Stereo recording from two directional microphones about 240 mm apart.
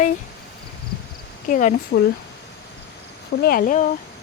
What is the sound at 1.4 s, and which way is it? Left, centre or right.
Speech, left.